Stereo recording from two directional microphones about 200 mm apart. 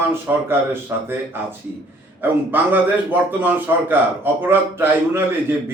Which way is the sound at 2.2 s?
10° right (ahead or behind).